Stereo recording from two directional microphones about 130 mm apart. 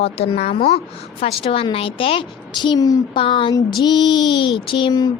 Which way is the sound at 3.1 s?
40° left (ahead or behind).